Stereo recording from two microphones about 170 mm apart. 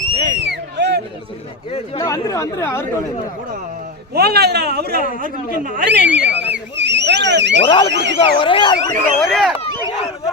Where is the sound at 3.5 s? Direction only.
55° right (ahead or behind); by 4.9 s 70° right (ahead or behind).